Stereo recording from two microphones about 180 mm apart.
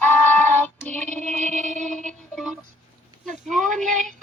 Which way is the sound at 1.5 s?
40° right (ahead or behind).